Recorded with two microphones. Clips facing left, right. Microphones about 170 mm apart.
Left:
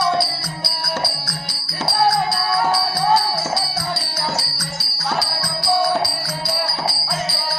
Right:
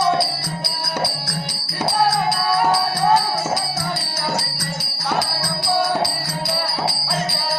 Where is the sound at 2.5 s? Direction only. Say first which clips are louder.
Right 2 dB; 20° right (ahead or behind).